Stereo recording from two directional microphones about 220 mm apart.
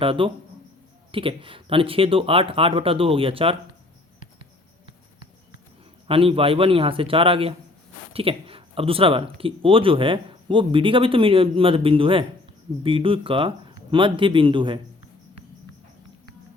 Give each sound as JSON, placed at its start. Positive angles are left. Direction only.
{"t": 0.0, "sound": "speech", "side_deg": -25}
{"t": 6.1, "sound": "speech", "side_deg": -25}